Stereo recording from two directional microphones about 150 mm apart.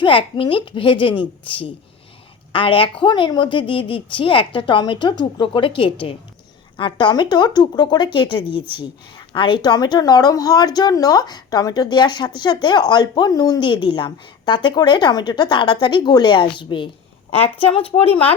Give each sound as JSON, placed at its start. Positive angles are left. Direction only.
{"t": 0.0, "sound": "a woman's voice", "side_deg": 35}